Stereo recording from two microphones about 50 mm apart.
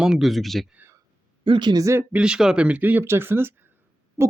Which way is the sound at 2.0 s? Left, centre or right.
Right.